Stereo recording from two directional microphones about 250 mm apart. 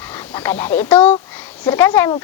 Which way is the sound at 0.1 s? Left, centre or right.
Centre.